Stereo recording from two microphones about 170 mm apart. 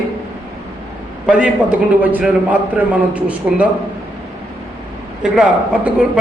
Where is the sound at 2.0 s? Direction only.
10° right (ahead or behind).